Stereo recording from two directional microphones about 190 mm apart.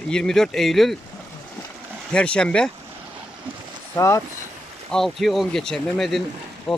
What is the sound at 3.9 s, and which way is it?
Speech, 15° left (ahead or behind).